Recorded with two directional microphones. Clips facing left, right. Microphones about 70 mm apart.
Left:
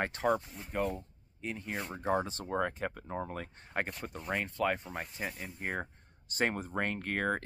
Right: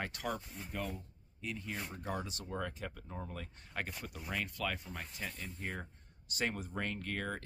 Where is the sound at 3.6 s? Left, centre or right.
Left.